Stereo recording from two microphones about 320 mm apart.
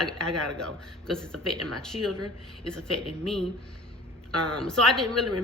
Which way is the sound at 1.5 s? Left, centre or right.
Right.